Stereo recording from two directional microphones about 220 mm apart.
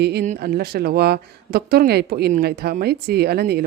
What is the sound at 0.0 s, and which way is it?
Speech, 50° right (ahead or behind).